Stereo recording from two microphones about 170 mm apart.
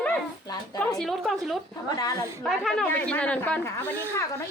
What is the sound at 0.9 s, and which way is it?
A woman's voice, centre (ahead or behind).